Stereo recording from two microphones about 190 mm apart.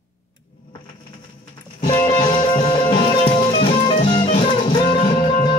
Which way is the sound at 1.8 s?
25° left (ahead or behind).